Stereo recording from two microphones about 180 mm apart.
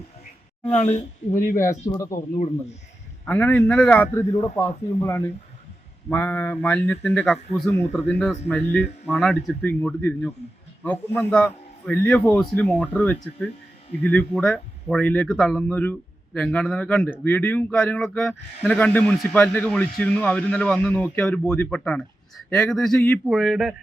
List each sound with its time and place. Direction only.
1.5 s speech: 15° left (ahead or behind); by 23.7 s centre (ahead or behind)